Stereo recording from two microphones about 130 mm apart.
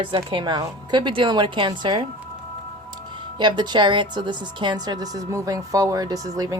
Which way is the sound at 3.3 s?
35° right (ahead or behind).